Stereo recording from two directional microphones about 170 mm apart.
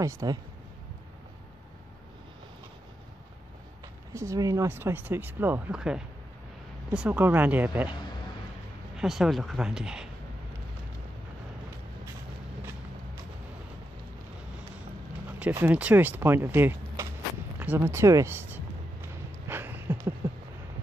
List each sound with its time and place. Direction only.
0.0 s speech: 20° right (ahead or behind)
4.1 s speech: 15° right (ahead or behind)
8.9 s speech: centre (ahead or behind)
15.3 s speech: 10° right (ahead or behind)
17.6 s music: 10° right (ahead or behind)